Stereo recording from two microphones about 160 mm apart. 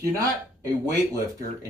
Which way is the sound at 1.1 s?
20° right (ahead or behind).